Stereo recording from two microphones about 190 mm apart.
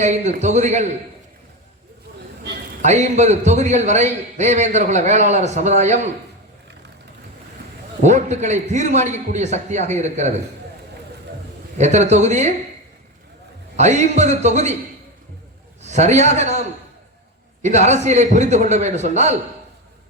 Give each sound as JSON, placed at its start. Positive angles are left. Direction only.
{"t": 0.0, "sound": "a man's voice", "side_deg": -40}
{"t": 2.8, "sound": "a man's voice", "side_deg": -40}
{"t": 8.0, "sound": "a man's voice", "side_deg": -40}
{"t": 11.8, "sound": "a man's voice", "side_deg": -35}
{"t": 13.7, "sound": "a man's voice", "side_deg": -35}
{"t": 15.8, "sound": "a man's voice", "side_deg": -35}